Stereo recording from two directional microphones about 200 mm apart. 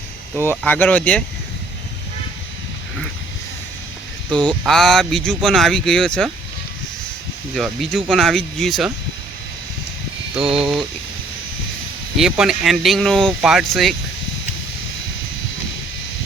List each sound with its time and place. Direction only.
0.4 s speech: 5° left (ahead or behind)
4.3 s speech: 5° left (ahead or behind)
7.5 s speech: centre (ahead or behind)
10.3 s speech: 5° right (ahead or behind)
12.1 s speech: centre (ahead or behind)